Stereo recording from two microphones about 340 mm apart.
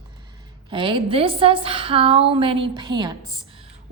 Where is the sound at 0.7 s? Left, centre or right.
Centre.